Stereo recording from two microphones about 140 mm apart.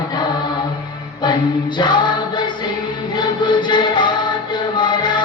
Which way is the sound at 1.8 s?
35° left (ahead or behind).